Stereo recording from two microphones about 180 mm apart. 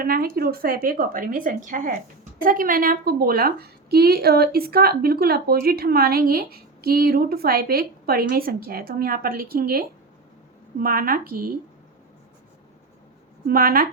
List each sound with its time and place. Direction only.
0.0 s a woman's voice: 55° right (ahead or behind)
13.5 s a woman's voice: 55° right (ahead or behind)